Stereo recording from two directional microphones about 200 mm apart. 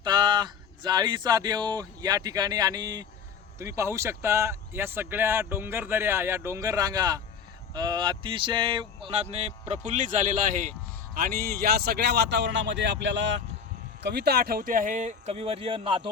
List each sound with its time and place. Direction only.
0.0 s speech: 20° right (ahead or behind); by 13.4 s 65° right (ahead or behind)
14.0 s speech: 55° right (ahead or behind); by 16.0 s 25° right (ahead or behind)